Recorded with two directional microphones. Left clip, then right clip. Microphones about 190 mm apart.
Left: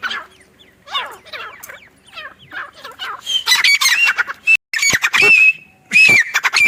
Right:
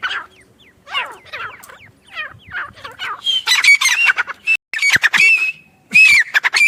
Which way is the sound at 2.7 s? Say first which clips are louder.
Right 1 dB; 30° right (ahead or behind).